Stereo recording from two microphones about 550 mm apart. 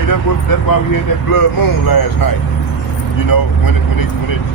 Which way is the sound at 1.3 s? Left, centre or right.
Left.